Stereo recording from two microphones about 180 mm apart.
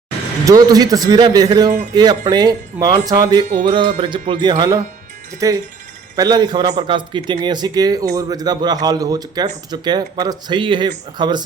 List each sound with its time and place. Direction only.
0.4 s speech: 20° right (ahead or behind)